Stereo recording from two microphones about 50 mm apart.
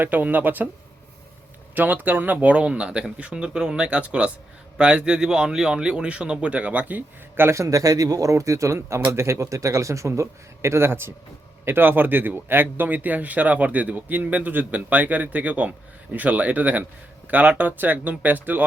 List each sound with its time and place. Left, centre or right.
0.0 s speech: right
1.7 s speech: right
7.4 s a man's voice: right
8.3 s speech: right